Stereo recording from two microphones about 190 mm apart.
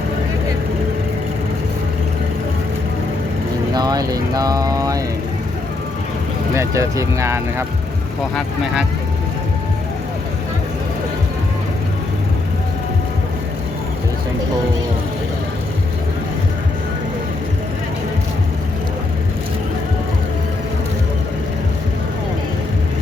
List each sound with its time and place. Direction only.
3.8 s speech: 20° right (ahead or behind)
6.5 s speech: 15° right (ahead or behind)
8.4 s speech: 5° right (ahead or behind)